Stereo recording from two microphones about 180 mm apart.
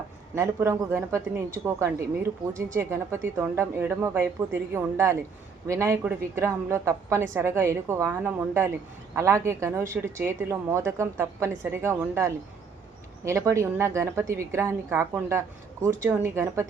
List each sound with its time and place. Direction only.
0.3 s a woman's voice: 15° right (ahead or behind)